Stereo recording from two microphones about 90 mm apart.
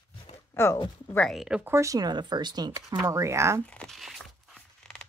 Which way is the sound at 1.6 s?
30° right (ahead or behind).